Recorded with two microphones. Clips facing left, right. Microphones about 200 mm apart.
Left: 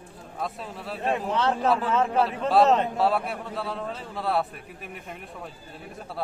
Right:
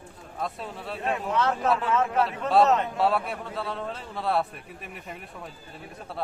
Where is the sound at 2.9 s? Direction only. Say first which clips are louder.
Left 1 dB; centre (ahead or behind).